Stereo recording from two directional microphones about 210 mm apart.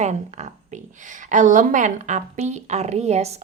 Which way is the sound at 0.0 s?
35° right (ahead or behind).